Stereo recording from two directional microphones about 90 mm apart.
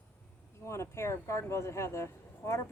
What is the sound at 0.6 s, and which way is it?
A woman's voice, 30° left (ahead or behind).